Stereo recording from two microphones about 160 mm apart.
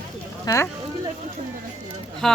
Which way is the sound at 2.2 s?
Centre (ahead or behind).